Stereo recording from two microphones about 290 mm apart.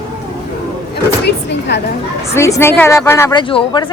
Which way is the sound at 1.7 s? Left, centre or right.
Left.